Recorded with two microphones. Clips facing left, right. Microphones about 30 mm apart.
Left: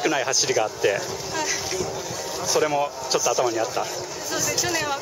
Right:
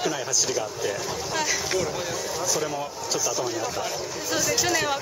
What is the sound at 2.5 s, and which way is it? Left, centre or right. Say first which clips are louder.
Speech: left 10 dB; left.